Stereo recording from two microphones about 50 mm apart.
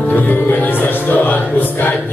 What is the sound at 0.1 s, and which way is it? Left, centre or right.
Music, left.